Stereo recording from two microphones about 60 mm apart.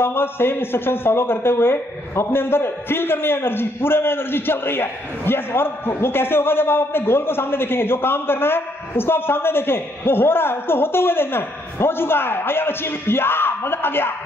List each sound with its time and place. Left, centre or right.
0.0 s a man's voice: left